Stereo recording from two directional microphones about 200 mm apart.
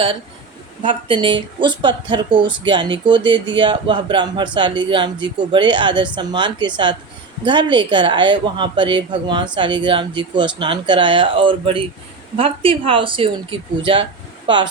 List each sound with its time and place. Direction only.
0.8 s speech: 25° right (ahead or behind)